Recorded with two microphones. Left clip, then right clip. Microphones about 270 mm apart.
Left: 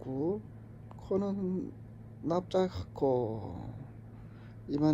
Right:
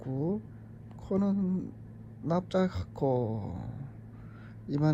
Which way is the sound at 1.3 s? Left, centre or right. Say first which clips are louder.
Right 3 dB; left.